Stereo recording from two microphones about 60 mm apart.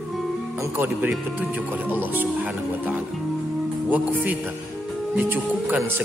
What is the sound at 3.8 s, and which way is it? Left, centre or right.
Speech, right.